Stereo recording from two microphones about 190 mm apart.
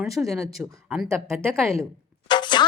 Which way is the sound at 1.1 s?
10° right (ahead or behind).